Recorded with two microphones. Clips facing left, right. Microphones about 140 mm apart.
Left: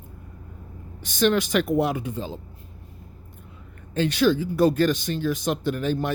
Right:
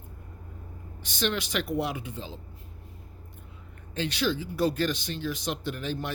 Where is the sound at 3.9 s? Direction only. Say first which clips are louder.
Left 8 dB; 50° left (ahead or behind).